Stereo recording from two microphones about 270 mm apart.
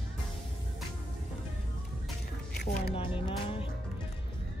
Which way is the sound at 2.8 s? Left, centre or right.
Centre.